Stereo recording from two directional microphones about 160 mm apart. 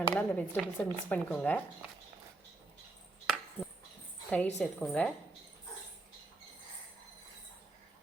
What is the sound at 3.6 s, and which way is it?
Dog, 10° left (ahead or behind).